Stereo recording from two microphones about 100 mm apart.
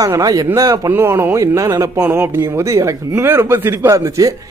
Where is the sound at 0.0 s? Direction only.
40° right (ahead or behind).